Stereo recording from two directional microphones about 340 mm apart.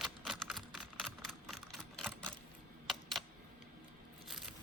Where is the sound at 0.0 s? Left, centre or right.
Centre.